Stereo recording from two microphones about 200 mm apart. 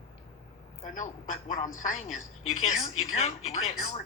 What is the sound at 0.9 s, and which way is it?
Speech, 35° left (ahead or behind).